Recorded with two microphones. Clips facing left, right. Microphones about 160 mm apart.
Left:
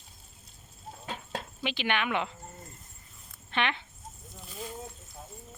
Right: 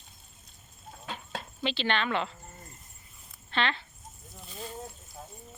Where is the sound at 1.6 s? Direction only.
10° left (ahead or behind).